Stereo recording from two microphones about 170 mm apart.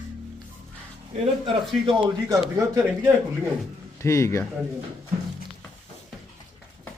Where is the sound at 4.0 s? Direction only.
15° left (ahead or behind).